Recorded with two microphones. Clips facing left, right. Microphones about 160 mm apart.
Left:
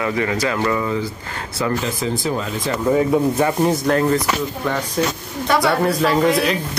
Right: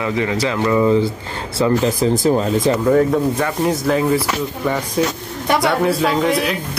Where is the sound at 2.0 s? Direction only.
40° right (ahead or behind).